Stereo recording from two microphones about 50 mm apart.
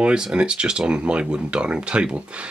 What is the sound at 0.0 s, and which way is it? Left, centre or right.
Speech, centre.